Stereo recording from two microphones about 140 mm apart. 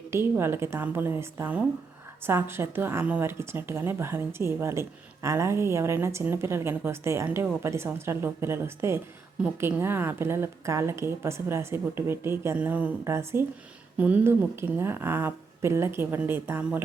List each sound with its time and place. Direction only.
0.1 s a woman's voice: 15° right (ahead or behind)